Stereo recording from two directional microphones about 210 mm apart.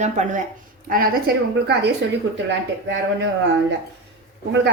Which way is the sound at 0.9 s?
45° right (ahead or behind).